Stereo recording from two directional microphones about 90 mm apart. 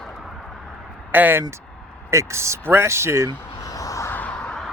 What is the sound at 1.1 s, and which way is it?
Speech, 20° right (ahead or behind).